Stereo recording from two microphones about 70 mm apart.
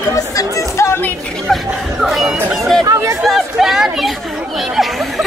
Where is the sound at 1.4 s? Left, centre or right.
Centre.